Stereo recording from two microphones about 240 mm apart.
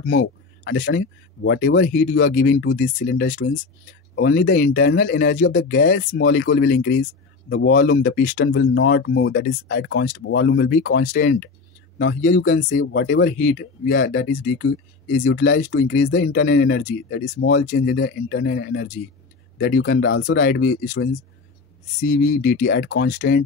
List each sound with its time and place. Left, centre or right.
0.2 s speech: left
5.6 s speech: left
8.2 s speech: left
8.5 s speech: left
12.0 s speech: left
17.4 s speech: left
17.6 s speech: left
22.1 s speech: left